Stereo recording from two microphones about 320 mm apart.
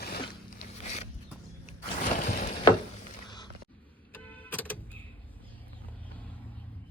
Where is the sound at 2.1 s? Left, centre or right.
Left.